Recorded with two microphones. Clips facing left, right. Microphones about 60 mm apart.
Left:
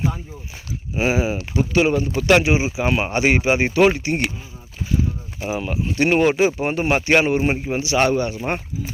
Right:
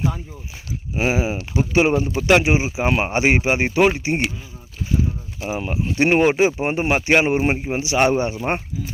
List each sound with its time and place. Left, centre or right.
0.9 s speech: centre
1.5 s speech: centre
2.8 s speech: centre
5.5 s speech: centre
7.3 s speech: centre
7.6 s speech: centre
8.0 s speech: right